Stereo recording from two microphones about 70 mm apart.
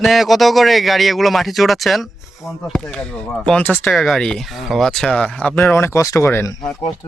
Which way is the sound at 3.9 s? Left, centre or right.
Centre.